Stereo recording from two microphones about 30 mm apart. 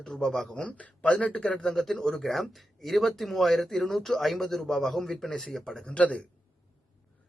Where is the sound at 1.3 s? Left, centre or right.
Left.